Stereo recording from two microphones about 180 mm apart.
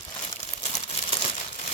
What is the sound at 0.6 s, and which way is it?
Crumpling, 35° left (ahead or behind).